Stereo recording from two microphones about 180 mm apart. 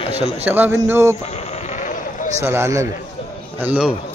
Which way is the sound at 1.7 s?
45° left (ahead or behind).